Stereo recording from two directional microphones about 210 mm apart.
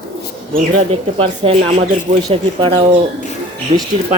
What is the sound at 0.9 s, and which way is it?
Speech, 25° right (ahead or behind).